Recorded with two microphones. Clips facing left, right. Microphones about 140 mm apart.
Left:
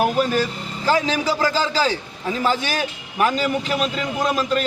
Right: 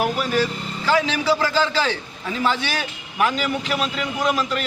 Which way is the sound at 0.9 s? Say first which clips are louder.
Even; 40° left (ahead or behind).